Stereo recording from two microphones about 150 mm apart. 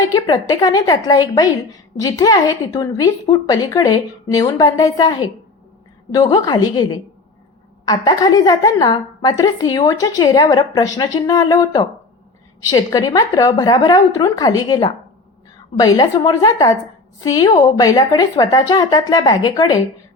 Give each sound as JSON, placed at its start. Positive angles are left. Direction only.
{"t": 0.1, "sound": "a woman's voice", "side_deg": 25}
{"t": 6.2, "sound": "a woman's voice", "side_deg": 30}